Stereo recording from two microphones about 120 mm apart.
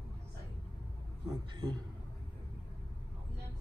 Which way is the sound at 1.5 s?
40° right (ahead or behind).